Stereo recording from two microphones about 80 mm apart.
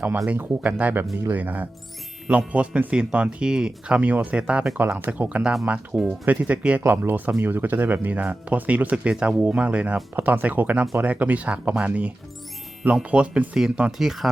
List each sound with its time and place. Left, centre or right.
0.3 s speech: right; by 14.3 s centre